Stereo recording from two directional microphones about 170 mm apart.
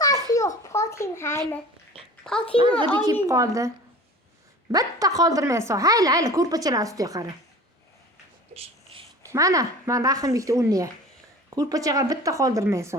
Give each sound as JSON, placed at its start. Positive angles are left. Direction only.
{"t": 0.0, "sound": "a sound", "side_deg": 20}
{"t": 2.3, "sound": "a child's voice", "side_deg": 5}
{"t": 3.2, "sound": "a woman's voice", "side_deg": -20}
{"t": 4.7, "sound": "a woman's voice", "side_deg": -20}
{"t": 9.2, "sound": "a woman's voice", "side_deg": -20}